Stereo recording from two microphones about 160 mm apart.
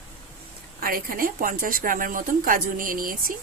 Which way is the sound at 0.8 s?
60° right (ahead or behind).